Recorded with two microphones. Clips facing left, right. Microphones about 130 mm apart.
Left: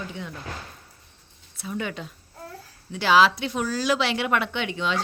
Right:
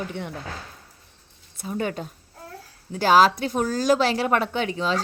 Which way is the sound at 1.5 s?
40° right (ahead or behind).